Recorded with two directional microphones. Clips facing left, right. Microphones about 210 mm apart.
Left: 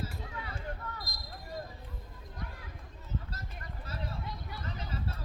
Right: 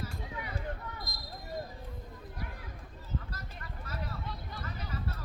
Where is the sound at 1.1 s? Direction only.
Centre (ahead or behind).